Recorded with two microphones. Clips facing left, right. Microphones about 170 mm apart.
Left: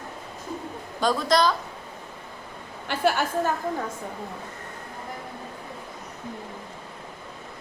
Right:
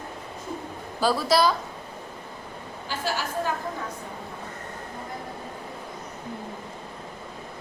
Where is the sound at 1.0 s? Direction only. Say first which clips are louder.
Even; 5° right (ahead or behind).